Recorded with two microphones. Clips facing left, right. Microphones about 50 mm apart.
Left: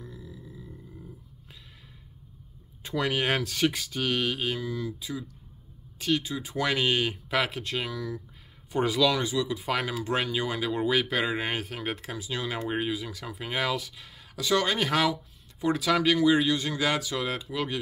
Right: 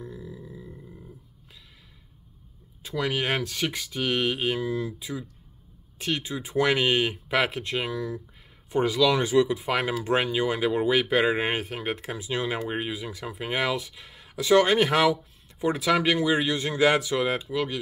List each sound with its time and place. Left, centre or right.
0.0 s a sound: centre
2.8 s speech: centre
8.7 s speech: centre
9.2 s speech: right
9.6 s speech: centre
17.5 s speech: centre